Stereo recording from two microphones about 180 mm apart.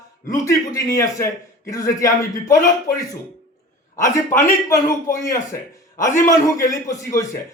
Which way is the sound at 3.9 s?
15° left (ahead or behind).